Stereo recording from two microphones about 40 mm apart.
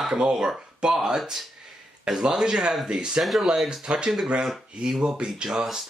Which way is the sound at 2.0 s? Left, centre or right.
Centre.